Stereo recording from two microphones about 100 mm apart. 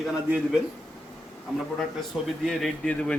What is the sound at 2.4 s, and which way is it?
Speech, 5° left (ahead or behind).